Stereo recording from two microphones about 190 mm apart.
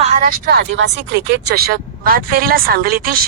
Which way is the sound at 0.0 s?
45° right (ahead or behind).